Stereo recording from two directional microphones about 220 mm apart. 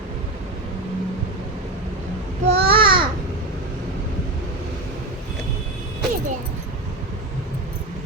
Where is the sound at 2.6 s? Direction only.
25° right (ahead or behind).